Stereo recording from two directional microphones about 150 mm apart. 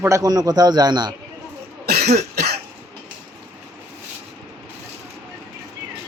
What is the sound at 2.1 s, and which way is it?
Cough, 90° right.